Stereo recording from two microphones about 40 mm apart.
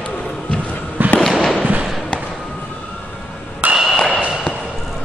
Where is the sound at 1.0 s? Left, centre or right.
Right.